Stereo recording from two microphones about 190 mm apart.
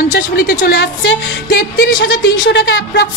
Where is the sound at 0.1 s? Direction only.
55° left (ahead or behind).